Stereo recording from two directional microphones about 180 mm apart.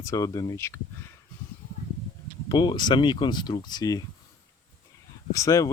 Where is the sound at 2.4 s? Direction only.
25° left (ahead or behind).